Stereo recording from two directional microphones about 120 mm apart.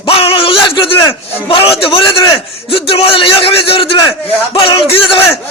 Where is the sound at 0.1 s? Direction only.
50° left (ahead or behind).